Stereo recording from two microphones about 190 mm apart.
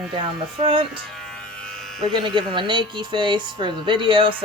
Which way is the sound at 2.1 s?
25° right (ahead or behind).